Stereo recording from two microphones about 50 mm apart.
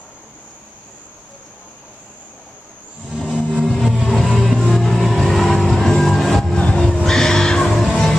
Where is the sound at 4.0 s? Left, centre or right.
Centre.